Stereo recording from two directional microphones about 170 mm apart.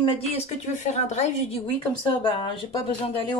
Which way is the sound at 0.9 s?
40° left (ahead or behind).